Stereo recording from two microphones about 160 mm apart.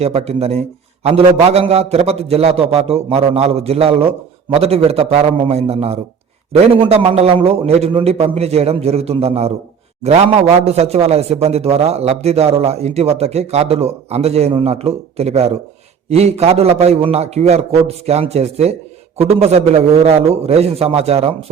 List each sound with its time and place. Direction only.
0.0 s a man's voice: 40° right (ahead or behind)